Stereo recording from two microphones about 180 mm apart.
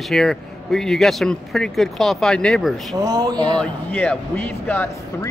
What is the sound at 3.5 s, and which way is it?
Speech, 10° left (ahead or behind).